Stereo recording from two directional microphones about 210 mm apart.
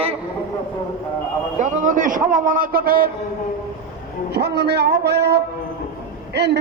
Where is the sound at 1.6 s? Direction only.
40° right (ahead or behind).